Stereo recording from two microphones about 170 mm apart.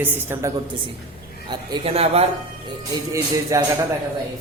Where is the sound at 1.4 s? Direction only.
30° right (ahead or behind).